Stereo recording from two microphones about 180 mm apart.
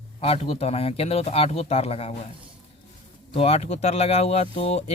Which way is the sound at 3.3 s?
35° left (ahead or behind).